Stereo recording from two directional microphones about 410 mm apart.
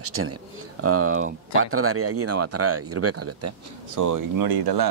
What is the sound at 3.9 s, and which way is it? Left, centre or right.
Speech, right.